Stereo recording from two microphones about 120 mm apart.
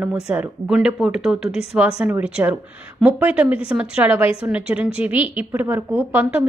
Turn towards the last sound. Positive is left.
turn(degrees=-15)  # may be behind; listen again after turning